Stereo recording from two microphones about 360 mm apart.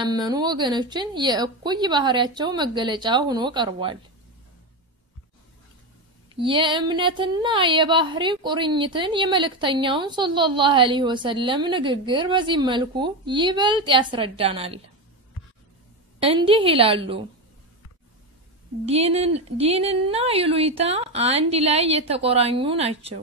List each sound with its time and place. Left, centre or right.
0.0 s speech: centre
6.4 s speech: centre
16.2 s speech: centre
18.9 s speech: centre